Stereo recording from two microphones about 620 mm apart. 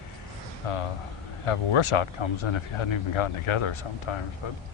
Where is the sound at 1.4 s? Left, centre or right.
Left.